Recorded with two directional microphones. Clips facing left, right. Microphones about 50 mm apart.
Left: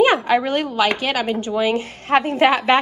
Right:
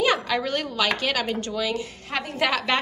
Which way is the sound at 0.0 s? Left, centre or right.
Left.